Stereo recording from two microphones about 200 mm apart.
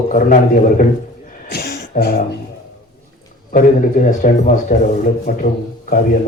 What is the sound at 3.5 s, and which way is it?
A man's voice, 40° left (ahead or behind).